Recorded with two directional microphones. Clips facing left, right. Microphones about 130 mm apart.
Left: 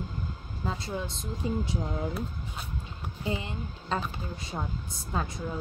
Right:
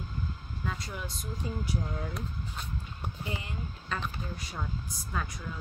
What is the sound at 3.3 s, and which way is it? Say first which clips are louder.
Speech: left 8 dB; 25° left (ahead or behind).